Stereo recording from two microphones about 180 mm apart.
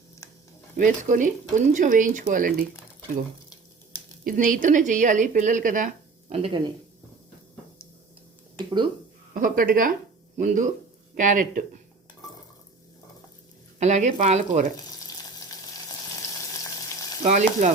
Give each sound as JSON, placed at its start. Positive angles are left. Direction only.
{"t": 0.8, "sound": "a woman's voice", "side_deg": -45}
{"t": 4.2, "sound": "a woman's voice", "side_deg": -50}
{"t": 9.3, "sound": "a woman's voice", "side_deg": -50}
{"t": 13.7, "sound": "speech", "side_deg": -40}
{"t": 17.2, "sound": "speech", "side_deg": -40}